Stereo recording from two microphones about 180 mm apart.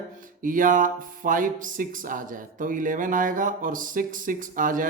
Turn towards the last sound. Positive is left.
turn(degrees=-50)  # may be behind; listen again after turning